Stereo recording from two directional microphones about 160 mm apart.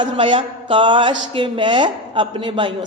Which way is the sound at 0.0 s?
30° right (ahead or behind).